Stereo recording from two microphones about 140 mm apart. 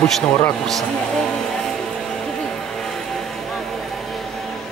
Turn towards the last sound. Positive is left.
turn(degrees=0)  # may be behind; listen again after turning